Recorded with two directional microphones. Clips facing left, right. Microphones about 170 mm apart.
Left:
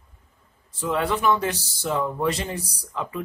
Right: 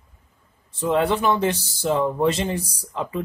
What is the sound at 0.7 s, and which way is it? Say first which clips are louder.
Speech: right 4 dB; 30° right (ahead or behind).